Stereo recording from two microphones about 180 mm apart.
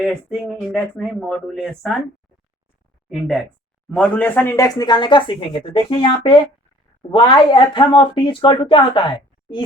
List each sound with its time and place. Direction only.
0.7 s speech: centre (ahead or behind)
3.1 s speech: centre (ahead or behind); by 9.6 s 25° left (ahead or behind)